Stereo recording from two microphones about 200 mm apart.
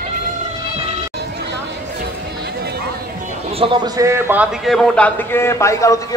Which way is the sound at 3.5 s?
25° right (ahead or behind).